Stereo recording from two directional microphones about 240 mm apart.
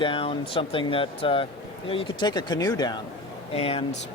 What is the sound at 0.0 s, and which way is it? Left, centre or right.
Speech, left.